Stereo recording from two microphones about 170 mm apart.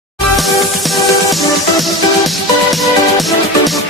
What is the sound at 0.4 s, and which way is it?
Music, centre (ahead or behind).